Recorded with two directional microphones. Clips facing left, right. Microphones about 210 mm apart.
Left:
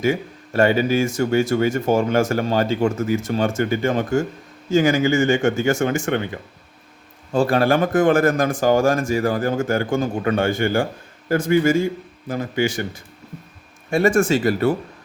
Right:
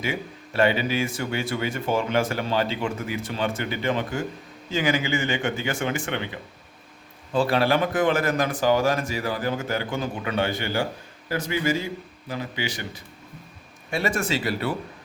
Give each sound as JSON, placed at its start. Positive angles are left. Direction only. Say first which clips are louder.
{"t": 0.0, "sound": "speech", "louder": "left 8 dB", "side_deg": 45}